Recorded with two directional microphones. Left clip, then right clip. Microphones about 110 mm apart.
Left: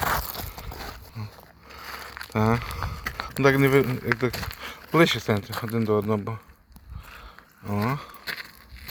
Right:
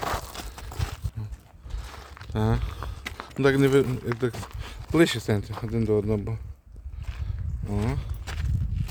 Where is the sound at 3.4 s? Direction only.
35° right (ahead or behind).